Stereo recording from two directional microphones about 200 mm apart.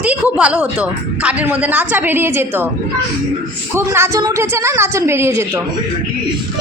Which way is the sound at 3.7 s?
10° right (ahead or behind).